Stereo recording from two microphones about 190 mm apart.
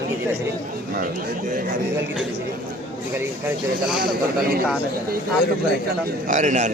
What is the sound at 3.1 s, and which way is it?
Speech, 10° right (ahead or behind).